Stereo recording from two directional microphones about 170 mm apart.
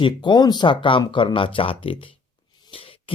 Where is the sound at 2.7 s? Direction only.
30° left (ahead or behind).